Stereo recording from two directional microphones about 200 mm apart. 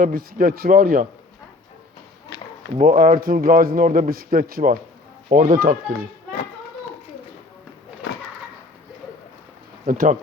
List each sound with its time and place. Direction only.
0.0 s speech: 45° right (ahead or behind)
2.7 s speech: 45° right (ahead or behind)
9.8 s speech: 45° right (ahead or behind)